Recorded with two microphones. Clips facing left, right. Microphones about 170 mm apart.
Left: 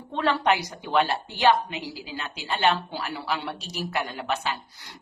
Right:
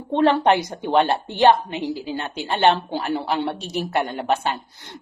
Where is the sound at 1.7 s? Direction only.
50° right (ahead or behind).